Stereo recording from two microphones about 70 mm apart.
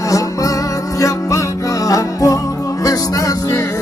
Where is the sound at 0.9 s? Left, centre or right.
Left.